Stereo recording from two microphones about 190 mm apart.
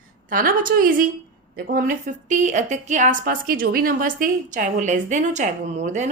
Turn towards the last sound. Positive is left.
turn(degrees=-40)  # may be behind; listen again after turning